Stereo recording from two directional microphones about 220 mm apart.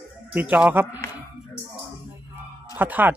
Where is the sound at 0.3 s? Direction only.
5° right (ahead or behind).